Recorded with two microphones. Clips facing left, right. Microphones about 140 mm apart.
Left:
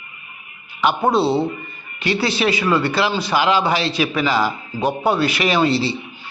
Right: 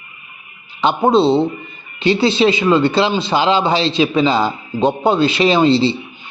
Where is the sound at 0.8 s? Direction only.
25° right (ahead or behind).